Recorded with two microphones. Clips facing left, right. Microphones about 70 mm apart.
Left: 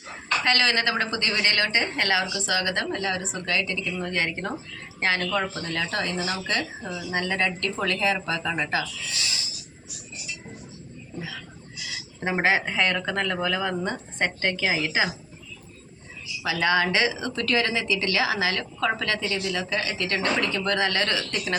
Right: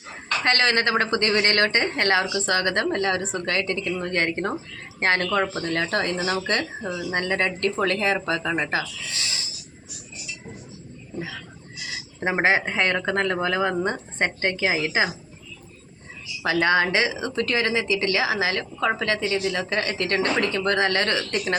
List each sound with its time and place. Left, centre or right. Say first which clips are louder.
0.4 s a woman's voice: right 3 dB; right
12.2 s a woman's voice: right 2 dB; right
16.4 s speech: right 3 dB; right
19.5 s a woman's voice: right 2 dB; right